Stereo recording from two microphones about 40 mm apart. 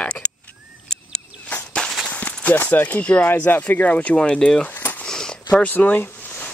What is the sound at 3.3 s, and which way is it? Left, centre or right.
Speech, left.